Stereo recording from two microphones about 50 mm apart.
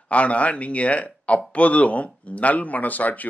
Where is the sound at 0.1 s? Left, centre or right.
Left.